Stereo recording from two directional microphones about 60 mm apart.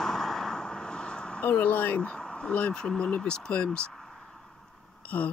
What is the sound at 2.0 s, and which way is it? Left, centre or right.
Speech, centre.